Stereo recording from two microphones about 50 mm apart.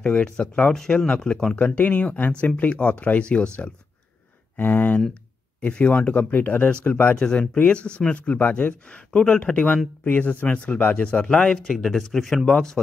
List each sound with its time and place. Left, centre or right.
0.0 s speech: centre
1.6 s speech: left
4.6 s speech: left
6.3 s speech: left
7.2 s speech: centre; by 8.7 s left
8.8 s speech: left
11.1 s speech: centre